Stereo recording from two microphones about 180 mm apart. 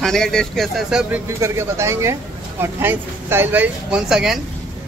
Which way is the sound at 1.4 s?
15° right (ahead or behind).